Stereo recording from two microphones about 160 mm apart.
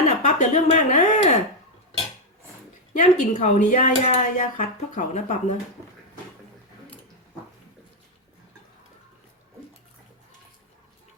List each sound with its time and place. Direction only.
0.3 s speech: 45° left (ahead or behind)
2.9 s speech: 50° left (ahead or behind)